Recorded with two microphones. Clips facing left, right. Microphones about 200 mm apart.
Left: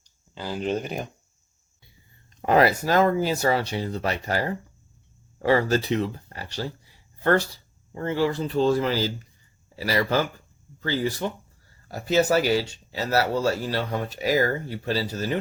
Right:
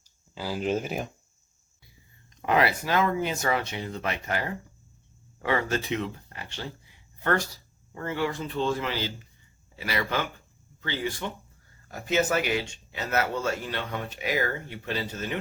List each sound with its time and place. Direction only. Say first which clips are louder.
0.3 s speech: left 1 dB; 5° right (ahead or behind)
2.3 s speech: left 5 dB; 40° left (ahead or behind)